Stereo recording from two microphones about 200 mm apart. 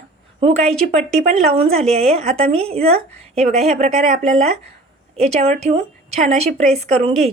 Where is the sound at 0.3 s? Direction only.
30° right (ahead or behind).